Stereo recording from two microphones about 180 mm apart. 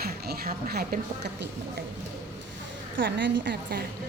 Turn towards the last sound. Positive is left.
turn(degrees=-65)  # may be behind; listen again after turning